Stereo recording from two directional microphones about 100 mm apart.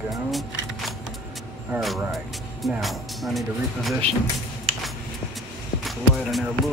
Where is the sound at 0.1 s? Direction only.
Centre (ahead or behind).